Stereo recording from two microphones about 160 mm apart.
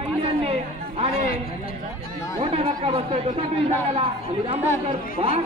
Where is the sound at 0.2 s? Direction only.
40° right (ahead or behind).